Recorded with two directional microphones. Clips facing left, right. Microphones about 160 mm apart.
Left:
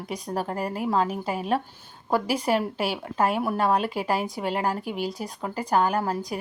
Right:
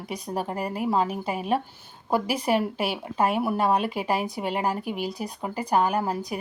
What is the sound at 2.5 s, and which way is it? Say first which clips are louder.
Speech: right 1 dB; 10° right (ahead or behind).